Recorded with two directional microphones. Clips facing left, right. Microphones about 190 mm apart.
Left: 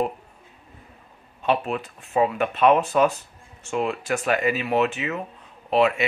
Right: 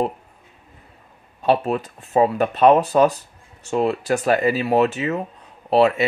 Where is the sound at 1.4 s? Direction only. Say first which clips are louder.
Right 5 dB; 40° right (ahead or behind).